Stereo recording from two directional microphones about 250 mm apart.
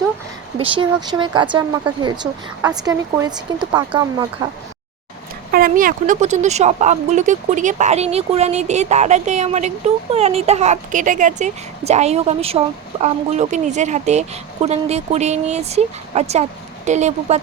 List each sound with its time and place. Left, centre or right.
0.6 s speech: right
5.5 s speech: right